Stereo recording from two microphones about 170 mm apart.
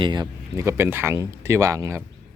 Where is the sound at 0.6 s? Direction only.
15° right (ahead or behind).